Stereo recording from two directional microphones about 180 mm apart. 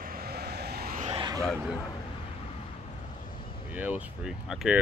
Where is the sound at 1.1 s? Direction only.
25° right (ahead or behind).